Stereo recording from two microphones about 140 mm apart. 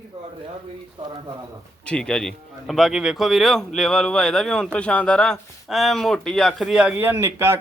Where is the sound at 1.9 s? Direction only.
5° left (ahead or behind).